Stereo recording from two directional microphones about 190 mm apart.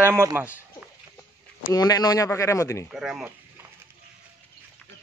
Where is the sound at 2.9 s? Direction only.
5° right (ahead or behind).